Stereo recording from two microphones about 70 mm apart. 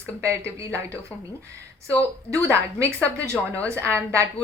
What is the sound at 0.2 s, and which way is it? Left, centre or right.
Speech, right.